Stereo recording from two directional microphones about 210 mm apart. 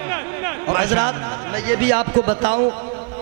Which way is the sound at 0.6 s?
20° right (ahead or behind).